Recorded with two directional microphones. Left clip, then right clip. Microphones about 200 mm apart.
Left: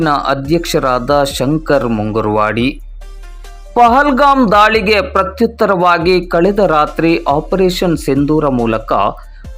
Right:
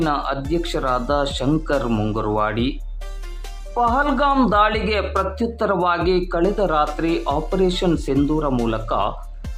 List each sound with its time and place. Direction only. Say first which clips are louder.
0.0 s speech: left 8 dB; 30° left (ahead or behind)
1.9 s speech: left 5 dB; 5° left (ahead or behind)
2.1 s speech: left 9 dB; 25° left (ahead or behind)
3.8 s speech: left 10 dB; 30° left (ahead or behind)